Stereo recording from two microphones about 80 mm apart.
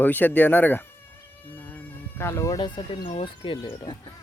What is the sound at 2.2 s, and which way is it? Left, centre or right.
Speech, left.